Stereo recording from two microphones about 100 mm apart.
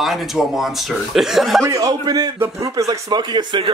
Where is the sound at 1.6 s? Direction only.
35° right (ahead or behind).